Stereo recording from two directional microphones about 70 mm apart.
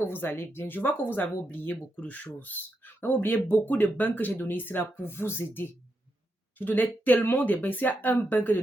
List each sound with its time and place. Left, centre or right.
0.0 s a woman's voice: left